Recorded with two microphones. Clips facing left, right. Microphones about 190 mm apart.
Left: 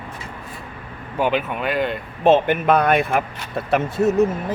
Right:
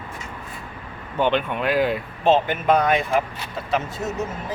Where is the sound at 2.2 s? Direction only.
60° left (ahead or behind).